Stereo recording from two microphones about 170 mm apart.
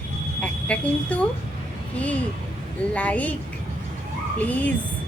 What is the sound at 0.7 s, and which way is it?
Speech, 10° left (ahead or behind).